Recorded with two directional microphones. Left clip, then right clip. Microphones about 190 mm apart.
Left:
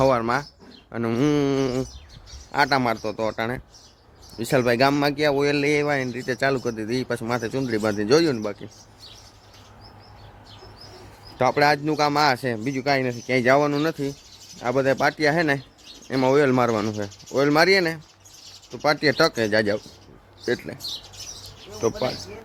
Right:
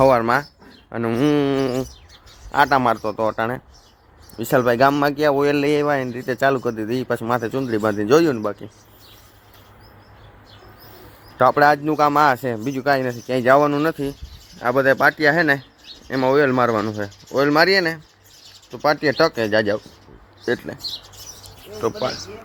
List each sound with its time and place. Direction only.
0.0 s speech: 30° right (ahead or behind)
0.9 s speech: 5° right (ahead or behind)
11.3 s speech: 5° right (ahead or behind)
21.8 s speech: 10° left (ahead or behind)